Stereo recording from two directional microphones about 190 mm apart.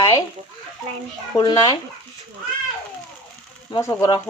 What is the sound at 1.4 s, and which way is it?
Speech, 25° left (ahead or behind).